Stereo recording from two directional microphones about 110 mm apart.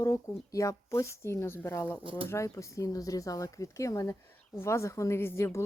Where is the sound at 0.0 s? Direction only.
30° left (ahead or behind).